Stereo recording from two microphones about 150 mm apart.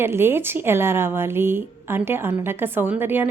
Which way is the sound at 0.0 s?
15° right (ahead or behind).